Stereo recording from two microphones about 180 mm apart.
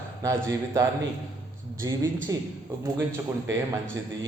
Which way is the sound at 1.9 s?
20° right (ahead or behind).